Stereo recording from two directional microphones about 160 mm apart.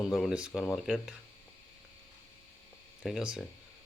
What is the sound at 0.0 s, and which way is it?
Speech, centre (ahead or behind).